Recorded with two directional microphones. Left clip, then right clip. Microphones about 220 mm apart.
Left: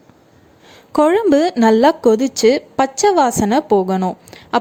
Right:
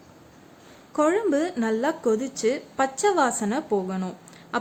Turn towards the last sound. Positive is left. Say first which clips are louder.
# left 14 dB
turn(degrees=30)  # may be behind; listen again after turning